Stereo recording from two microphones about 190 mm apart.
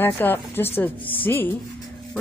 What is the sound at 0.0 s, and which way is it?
A woman's voice, 10° left (ahead or behind).